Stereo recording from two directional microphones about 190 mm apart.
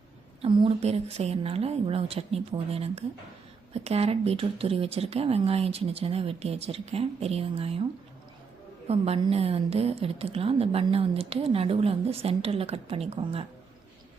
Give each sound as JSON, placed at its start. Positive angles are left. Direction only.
{"t": 0.4, "sound": "a woman's voice", "side_deg": -25}
{"t": 8.9, "sound": "a woman's voice", "side_deg": -30}